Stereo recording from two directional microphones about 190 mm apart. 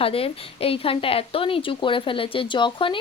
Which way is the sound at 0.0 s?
30° left (ahead or behind).